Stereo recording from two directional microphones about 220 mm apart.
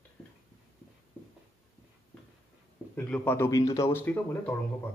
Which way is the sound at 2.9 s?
10° left (ahead or behind).